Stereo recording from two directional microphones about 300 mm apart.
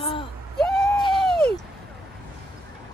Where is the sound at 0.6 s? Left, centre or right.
Centre.